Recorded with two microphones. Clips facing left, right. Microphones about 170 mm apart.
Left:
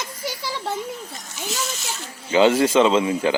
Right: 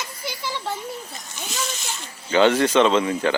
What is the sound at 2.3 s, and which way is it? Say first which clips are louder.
Speech: left 1 dB; 10° left (ahead or behind).